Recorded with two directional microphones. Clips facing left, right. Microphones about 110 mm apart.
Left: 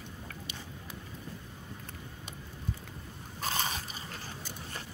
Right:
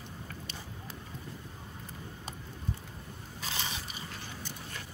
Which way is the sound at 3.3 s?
45° left (ahead or behind).